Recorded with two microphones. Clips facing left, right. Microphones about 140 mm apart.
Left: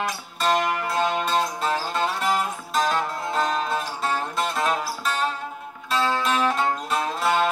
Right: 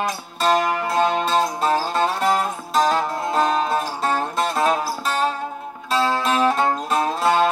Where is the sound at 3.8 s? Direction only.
40° right (ahead or behind).